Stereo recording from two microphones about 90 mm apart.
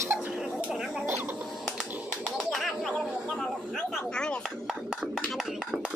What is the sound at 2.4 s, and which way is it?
Bird, centre (ahead or behind).